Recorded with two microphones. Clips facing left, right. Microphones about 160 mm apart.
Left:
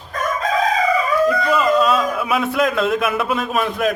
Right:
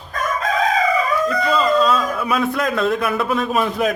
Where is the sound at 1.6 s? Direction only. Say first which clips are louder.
Right 1 dB; 10° left (ahead or behind).